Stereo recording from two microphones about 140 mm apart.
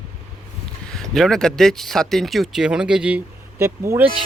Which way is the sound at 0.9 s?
5° left (ahead or behind).